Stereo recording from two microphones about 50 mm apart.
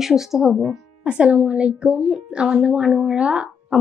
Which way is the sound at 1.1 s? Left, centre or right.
Right.